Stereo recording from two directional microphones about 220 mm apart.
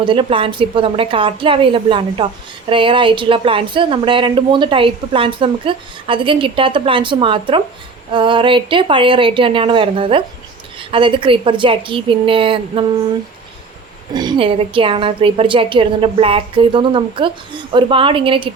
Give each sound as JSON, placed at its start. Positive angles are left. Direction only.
{"t": 0.0, "sound": "speech", "side_deg": -25}
{"t": 14.1, "sound": "speech", "side_deg": -20}